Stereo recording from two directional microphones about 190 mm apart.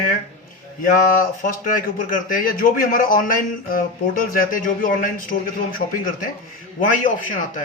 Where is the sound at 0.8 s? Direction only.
45° left (ahead or behind).